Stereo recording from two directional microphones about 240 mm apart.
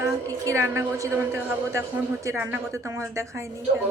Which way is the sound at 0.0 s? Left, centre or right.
Centre.